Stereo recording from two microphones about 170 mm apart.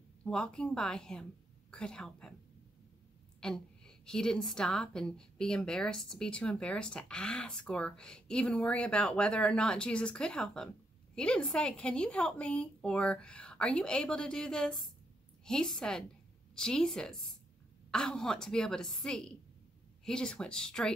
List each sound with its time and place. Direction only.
0.2 s a woman's voice: 5° left (ahead or behind)
3.3 s a woman's voice: 5° left (ahead or behind)